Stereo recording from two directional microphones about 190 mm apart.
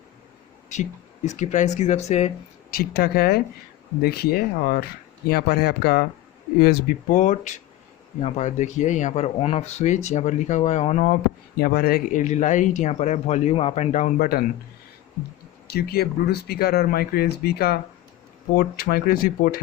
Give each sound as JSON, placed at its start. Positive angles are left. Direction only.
{"t": 0.7, "sound": "speech", "side_deg": 40}
{"t": 2.6, "sound": "speech", "side_deg": 50}
{"t": 11.6, "sound": "speech", "side_deg": 50}
{"t": 15.6, "sound": "speech", "side_deg": 55}